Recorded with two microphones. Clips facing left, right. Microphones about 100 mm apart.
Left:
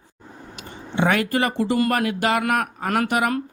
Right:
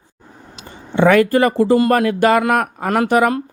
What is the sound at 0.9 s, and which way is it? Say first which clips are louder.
A man's voice: right 8 dB; 45° right (ahead or behind).